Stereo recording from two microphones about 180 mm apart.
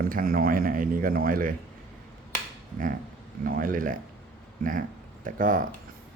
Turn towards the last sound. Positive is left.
turn(degrees=-50)  # may be behind; listen again after turning